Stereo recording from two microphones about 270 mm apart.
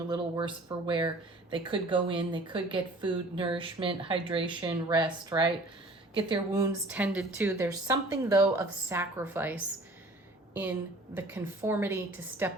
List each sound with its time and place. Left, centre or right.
0.1 s speech: centre
11.1 s speech: centre